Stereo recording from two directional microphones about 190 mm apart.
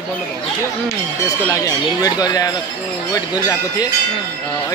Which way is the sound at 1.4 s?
15° left (ahead or behind).